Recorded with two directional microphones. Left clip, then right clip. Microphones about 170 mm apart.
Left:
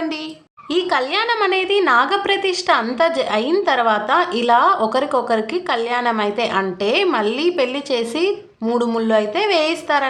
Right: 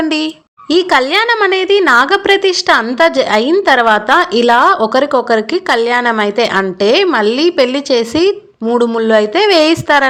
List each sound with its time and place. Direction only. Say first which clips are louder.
0.7 s a woman's voice: right 8 dB; 40° right (ahead or behind)